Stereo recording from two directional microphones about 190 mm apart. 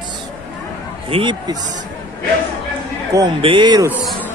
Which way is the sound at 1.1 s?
25° right (ahead or behind).